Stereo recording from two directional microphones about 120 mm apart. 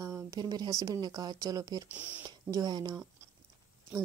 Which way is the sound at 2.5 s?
35° right (ahead or behind).